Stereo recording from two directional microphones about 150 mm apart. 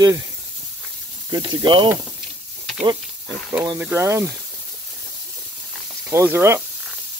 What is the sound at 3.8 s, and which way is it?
Speech, 15° right (ahead or behind).